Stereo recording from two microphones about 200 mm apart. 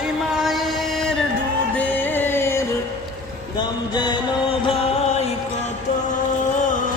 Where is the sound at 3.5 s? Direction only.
20° left (ahead or behind).